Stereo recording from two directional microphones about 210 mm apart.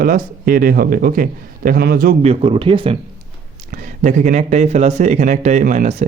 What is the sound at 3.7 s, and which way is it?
Speech, 35° right (ahead or behind).